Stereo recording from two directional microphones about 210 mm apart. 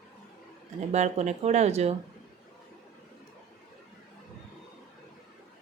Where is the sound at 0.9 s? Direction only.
35° right (ahead or behind).